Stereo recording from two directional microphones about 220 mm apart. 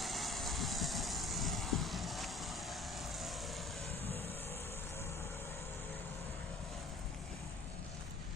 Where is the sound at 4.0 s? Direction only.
25° right (ahead or behind).